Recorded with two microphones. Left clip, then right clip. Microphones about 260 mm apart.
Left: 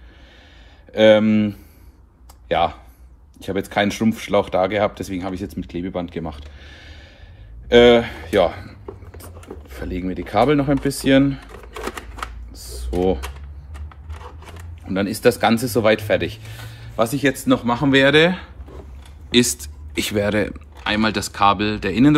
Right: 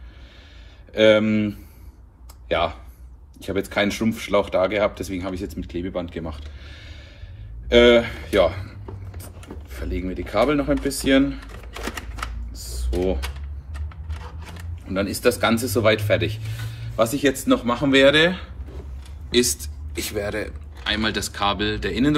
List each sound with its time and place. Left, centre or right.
0.9 s speech: left
14.9 s speech: left